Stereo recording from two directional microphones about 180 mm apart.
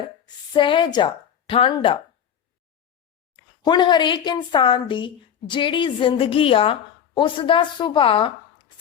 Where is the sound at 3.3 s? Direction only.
25° left (ahead or behind).